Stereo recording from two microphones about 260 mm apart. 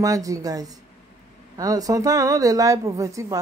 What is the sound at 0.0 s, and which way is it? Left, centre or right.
A woman's voice, centre.